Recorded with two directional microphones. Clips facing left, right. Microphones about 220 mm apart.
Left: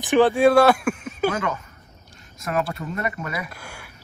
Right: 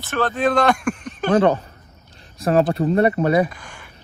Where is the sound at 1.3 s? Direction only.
35° right (ahead or behind).